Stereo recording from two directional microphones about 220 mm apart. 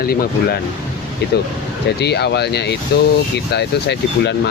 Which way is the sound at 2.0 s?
50° left (ahead or behind).